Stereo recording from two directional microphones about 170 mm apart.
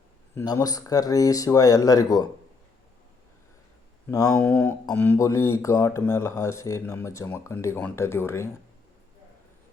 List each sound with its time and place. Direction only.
0.3 s speech: 20° left (ahead or behind)
4.4 s speech: 10° left (ahead or behind)